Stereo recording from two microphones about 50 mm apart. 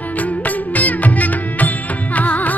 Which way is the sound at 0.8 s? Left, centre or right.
Left.